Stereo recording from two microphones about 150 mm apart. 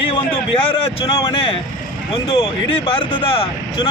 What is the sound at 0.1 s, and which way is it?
A man's voice, 35° left (ahead or behind).